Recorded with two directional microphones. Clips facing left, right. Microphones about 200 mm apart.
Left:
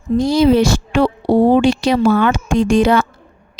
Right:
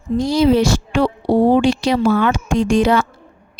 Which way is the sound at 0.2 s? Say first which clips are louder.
Left 2 dB; 55° left (ahead or behind).